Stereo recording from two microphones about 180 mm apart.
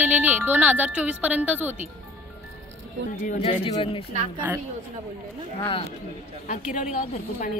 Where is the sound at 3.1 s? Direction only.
50° left (ahead or behind).